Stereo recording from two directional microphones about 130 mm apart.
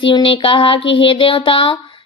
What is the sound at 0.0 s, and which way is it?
A woman's voice, 40° left (ahead or behind).